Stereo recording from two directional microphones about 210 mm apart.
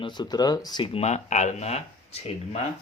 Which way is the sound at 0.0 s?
20° left (ahead or behind).